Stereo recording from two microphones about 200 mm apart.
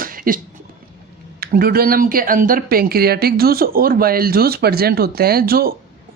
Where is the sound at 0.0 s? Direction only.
45° right (ahead or behind).